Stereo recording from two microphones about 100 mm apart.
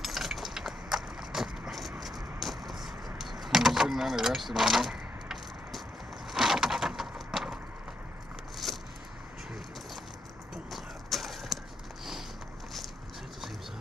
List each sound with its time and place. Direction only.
0.0 s a sound: 5° right (ahead or behind)
8.6 s vehicle: centre (ahead or behind)
10.5 s clip-clop: centre (ahead or behind)